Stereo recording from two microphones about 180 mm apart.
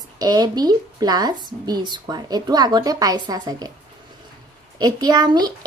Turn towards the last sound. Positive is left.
turn(degrees=-25)  # may be behind; listen again after turning